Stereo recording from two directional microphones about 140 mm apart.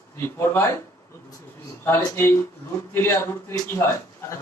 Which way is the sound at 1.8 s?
15° left (ahead or behind).